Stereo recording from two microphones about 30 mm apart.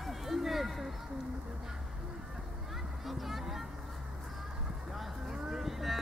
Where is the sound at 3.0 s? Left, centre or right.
Centre.